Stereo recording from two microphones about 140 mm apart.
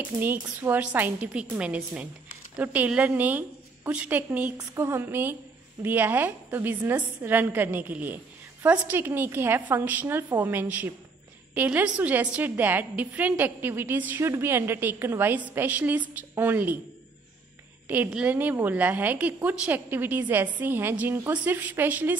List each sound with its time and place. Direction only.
0.2 s a woman's voice: 15° right (ahead or behind)
17.8 s a woman's voice: 10° right (ahead or behind)